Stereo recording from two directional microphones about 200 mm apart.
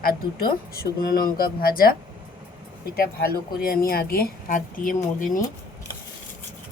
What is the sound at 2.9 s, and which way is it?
Speech, 50° left (ahead or behind).